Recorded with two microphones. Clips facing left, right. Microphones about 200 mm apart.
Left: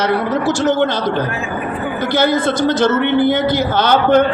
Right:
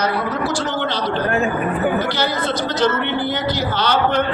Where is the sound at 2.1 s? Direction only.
50° left (ahead or behind).